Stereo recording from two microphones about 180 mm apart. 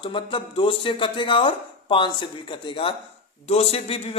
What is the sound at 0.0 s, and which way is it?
A man's voice, 25° left (ahead or behind).